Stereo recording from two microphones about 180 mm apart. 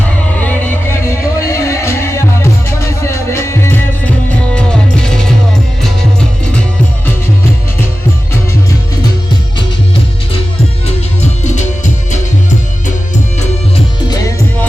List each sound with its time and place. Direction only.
1.1 s music: 15° left (ahead or behind)
10.8 s music: 40° left (ahead or behind)